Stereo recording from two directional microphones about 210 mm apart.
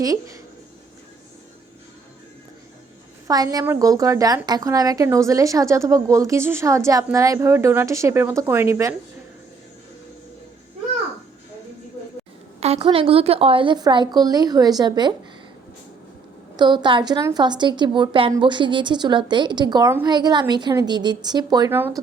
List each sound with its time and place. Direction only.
3.2 s a woman's voice: 15° right (ahead or behind)
12.5 s a woman's voice: 30° right (ahead or behind)
16.6 s a woman's voice: 20° right (ahead or behind)